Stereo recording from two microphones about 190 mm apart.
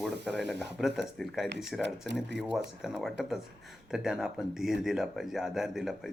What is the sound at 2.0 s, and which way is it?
Speech, 65° right (ahead or behind).